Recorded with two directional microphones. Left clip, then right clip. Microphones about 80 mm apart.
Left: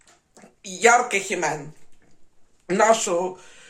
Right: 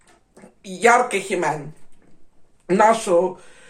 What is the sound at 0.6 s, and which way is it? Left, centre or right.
Speech, left.